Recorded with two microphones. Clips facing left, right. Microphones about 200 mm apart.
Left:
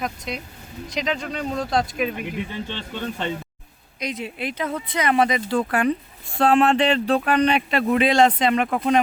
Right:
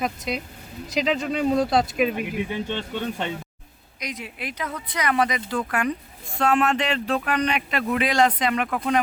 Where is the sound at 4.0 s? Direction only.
25° left (ahead or behind).